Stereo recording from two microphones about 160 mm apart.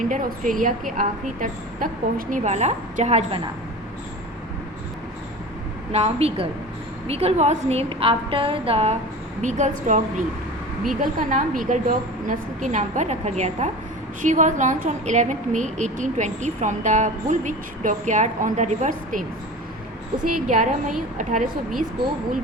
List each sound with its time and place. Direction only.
0.0 s a woman's voice: 55° right (ahead or behind)
5.9 s a woman's voice: 40° right (ahead or behind)
9.4 s a woman's voice: 50° right (ahead or behind)
20.2 s a woman's voice: 55° right (ahead or behind)